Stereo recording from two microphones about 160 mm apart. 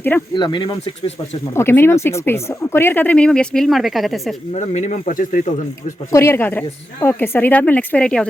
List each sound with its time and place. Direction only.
0.3 s speech: 30° left (ahead or behind)
1.5 s speech: 15° left (ahead or behind)
4.5 s speech: 45° left (ahead or behind)
6.1 s speech: 15° left (ahead or behind)